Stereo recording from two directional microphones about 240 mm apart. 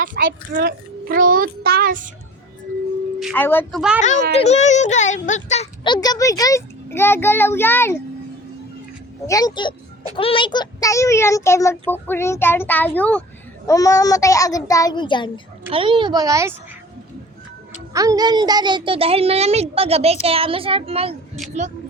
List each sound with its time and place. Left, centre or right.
0.0 s a child's voice: right
3.2 s speech: centre
4.0 s a child's voice: left; by 7.9 s centre
9.2 s a child's voice: centre
15.7 s speech: right
17.9 s a woman's voice: centre